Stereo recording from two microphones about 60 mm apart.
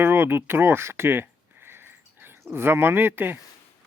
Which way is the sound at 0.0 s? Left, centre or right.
Right.